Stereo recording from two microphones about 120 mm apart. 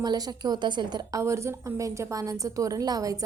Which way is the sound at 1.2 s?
25° right (ahead or behind).